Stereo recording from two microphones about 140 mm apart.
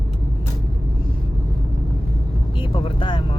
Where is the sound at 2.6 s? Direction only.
40° left (ahead or behind).